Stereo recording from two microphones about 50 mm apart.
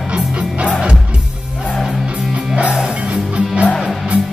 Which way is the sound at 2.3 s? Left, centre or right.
Right.